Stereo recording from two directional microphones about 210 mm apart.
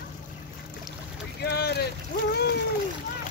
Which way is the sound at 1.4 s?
50° left (ahead or behind).